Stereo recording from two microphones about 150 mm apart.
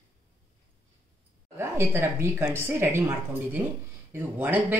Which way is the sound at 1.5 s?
15° right (ahead or behind).